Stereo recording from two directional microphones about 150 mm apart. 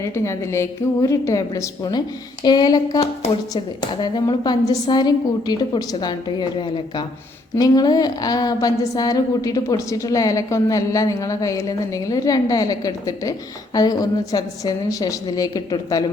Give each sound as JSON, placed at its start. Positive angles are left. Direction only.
{"t": 0.0, "sound": "a woman's voice", "side_deg": 20}